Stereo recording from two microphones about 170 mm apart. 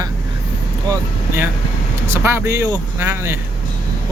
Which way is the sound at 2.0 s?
15° right (ahead or behind).